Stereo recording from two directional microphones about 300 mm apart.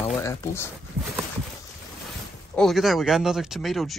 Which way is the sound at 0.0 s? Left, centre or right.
Centre.